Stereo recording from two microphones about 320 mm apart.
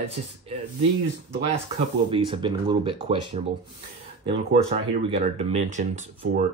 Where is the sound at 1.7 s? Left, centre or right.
Centre.